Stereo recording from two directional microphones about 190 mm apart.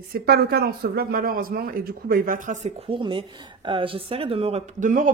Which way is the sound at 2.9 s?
25° right (ahead or behind).